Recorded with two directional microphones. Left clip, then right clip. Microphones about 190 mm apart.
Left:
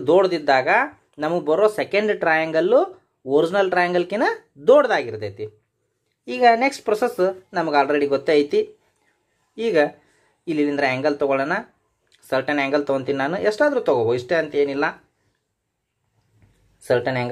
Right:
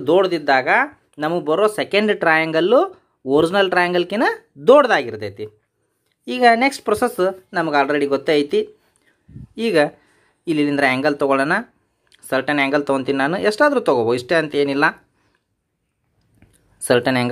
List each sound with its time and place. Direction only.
0.0 s speech: 15° right (ahead or behind)
9.6 s speech: 30° right (ahead or behind)
16.8 s speech: 40° right (ahead or behind)